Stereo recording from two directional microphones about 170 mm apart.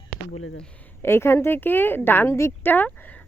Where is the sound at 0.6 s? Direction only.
15° left (ahead or behind).